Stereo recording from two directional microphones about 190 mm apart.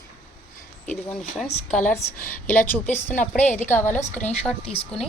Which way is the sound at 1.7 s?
10° left (ahead or behind).